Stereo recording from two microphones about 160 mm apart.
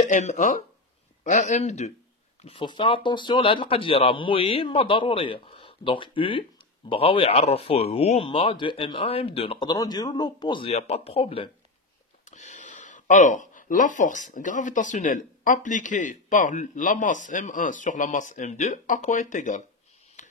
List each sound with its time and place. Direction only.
0.0 s speech: 50° left (ahead or behind)
2.4 s speech: 30° left (ahead or behind)
12.3 s speech: 50° left (ahead or behind)
20.2 s a sound: 50° left (ahead or behind)